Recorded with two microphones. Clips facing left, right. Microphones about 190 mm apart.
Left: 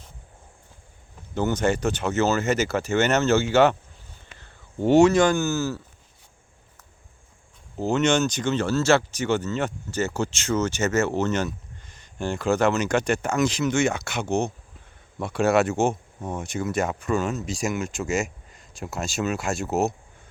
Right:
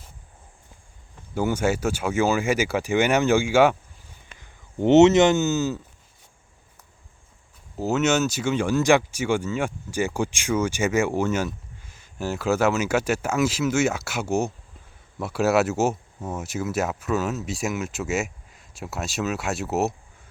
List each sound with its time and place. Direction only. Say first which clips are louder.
1.3 s speech: even; 10° right (ahead or behind)
7.8 s speech: even; 5° right (ahead or behind)